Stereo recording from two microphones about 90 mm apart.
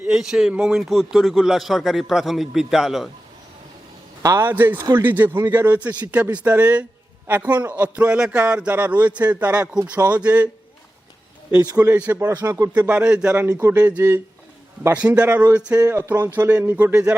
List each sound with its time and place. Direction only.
0.1 s a man's voice: 5° right (ahead or behind)
4.4 s a man's voice: 25° right (ahead or behind)
11.6 s speech: 45° right (ahead or behind)
11.9 s a man's voice: 15° right (ahead or behind)
12.5 s speech: 40° right (ahead or behind)
12.8 s a man's voice: 15° right (ahead or behind)
13.3 s speech: 20° right (ahead or behind)